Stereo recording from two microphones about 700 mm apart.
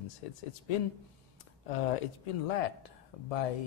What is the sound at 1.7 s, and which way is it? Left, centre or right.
Speech, left.